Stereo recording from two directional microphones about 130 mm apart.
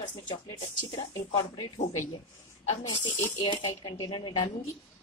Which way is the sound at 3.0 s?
20° left (ahead or behind).